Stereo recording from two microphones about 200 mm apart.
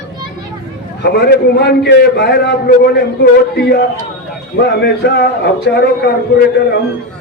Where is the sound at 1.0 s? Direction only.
55° left (ahead or behind).